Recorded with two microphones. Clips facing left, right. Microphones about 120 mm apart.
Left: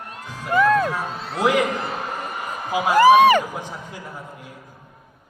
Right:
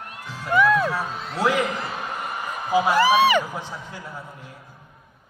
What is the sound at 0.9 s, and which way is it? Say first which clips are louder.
Speech: left 1 dB; 15° left (ahead or behind).